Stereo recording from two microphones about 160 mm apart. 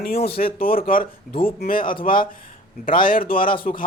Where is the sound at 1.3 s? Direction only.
35° left (ahead or behind).